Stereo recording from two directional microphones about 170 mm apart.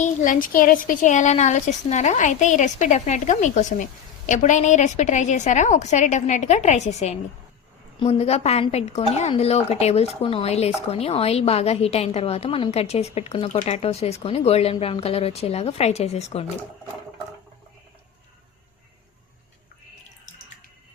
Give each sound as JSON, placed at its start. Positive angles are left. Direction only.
{"t": 0.0, "sound": "a woman's voice", "side_deg": 50}